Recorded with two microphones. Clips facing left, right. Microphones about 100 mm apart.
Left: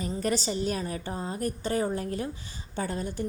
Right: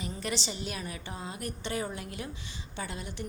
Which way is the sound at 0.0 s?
40° left (ahead or behind).